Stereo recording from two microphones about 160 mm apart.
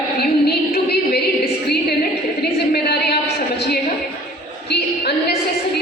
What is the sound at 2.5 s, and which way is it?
Speech, 85° left.